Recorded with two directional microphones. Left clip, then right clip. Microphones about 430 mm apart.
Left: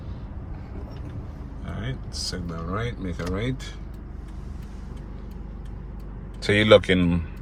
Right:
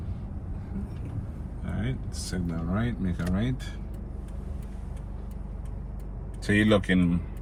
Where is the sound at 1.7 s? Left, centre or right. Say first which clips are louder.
Even; centre.